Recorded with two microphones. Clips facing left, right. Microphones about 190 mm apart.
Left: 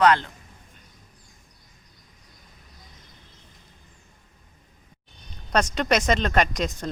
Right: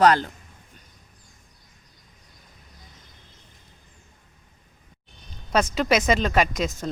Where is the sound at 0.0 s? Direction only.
40° right (ahead or behind).